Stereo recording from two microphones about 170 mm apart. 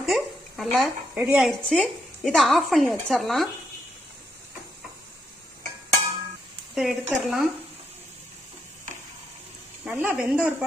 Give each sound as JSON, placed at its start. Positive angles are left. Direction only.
{"t": 0.0, "sound": "a sound", "side_deg": 0}
{"t": 1.2, "sound": "speech", "side_deg": -5}
{"t": 6.7, "sound": "speech", "side_deg": 0}
{"t": 9.8, "sound": "speech", "side_deg": -5}